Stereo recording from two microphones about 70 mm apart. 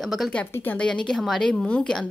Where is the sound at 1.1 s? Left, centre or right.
Centre.